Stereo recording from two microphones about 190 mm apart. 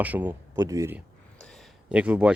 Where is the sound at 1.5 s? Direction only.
Centre (ahead or behind).